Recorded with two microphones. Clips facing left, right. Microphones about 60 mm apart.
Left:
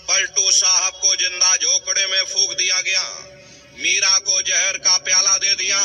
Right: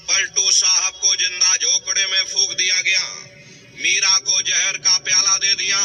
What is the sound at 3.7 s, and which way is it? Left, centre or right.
A man's voice, right.